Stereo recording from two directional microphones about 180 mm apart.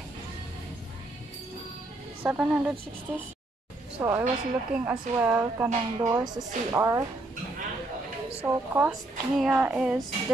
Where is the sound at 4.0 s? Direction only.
20° right (ahead or behind).